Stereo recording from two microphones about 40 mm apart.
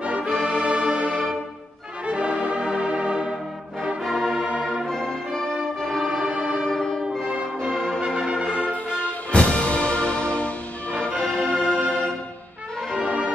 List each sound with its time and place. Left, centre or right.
0.0 s music: right
0.4 s music: centre
4.0 s music: centre
6.0 s music: right
6.7 s music: centre
7.2 s music: right
8.1 s brass instrument: right
9.3 s music: left
11.0 s music: centre
11.7 s music: right
13.0 s music: right